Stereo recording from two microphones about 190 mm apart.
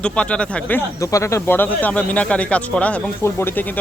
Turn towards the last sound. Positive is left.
turn(degrees=10)  # may be behind; listen again after turning